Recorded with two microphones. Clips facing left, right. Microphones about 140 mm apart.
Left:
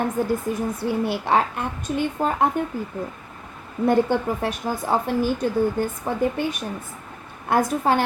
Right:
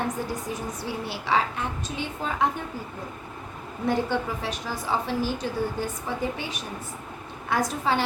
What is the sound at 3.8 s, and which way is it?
A woman's voice, 50° left (ahead or behind).